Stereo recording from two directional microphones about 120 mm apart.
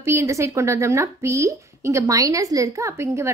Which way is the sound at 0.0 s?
25° right (ahead or behind).